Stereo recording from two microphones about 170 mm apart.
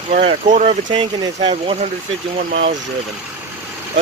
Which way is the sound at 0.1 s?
40° right (ahead or behind).